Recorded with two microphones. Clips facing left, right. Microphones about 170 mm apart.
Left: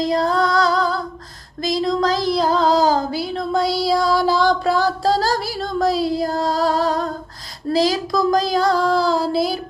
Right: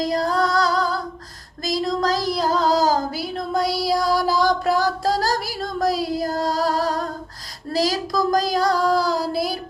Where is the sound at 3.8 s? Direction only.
25° left (ahead or behind).